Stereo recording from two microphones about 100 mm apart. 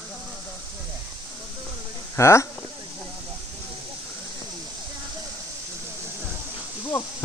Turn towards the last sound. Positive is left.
turn(degrees=25)  # may be behind; listen again after turning